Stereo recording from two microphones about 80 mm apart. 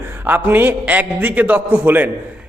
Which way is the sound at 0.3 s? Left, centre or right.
Right.